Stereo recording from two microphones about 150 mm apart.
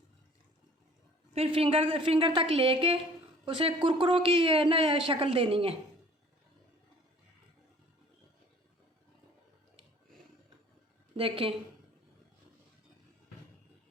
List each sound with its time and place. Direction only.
1.3 s a woman's voice: 40° right (ahead or behind)
11.2 s a woman's voice: 35° right (ahead or behind)